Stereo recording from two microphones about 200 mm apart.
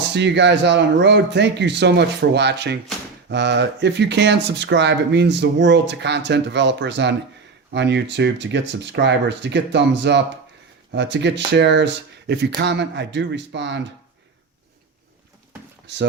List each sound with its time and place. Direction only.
0.1 s speech: 60° right (ahead or behind)